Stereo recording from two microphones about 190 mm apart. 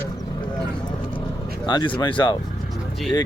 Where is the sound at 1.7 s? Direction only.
25° left (ahead or behind).